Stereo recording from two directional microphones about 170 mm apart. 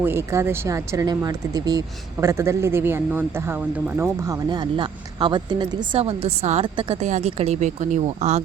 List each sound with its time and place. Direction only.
0.0 s speech: 15° right (ahead or behind)
6.0 s a woman's voice: 35° right (ahead or behind)